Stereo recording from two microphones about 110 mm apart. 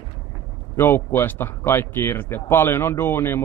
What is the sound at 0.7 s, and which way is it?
Speech, 20° left (ahead or behind).